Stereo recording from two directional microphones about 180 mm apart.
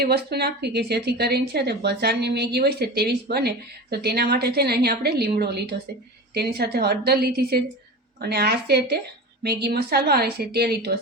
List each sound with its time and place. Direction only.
0.0 s a woman's voice: 65° right (ahead or behind)